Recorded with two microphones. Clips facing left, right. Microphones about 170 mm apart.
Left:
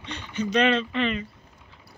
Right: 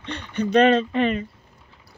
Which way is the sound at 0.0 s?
60° right (ahead or behind).